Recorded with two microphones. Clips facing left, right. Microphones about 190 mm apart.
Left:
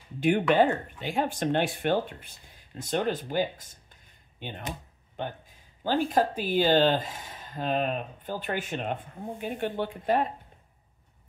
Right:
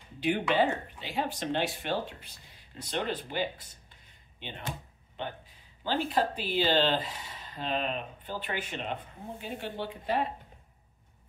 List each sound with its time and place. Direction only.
0.2 s speech: 50° left (ahead or behind)
5.9 s speech: 45° left (ahead or behind)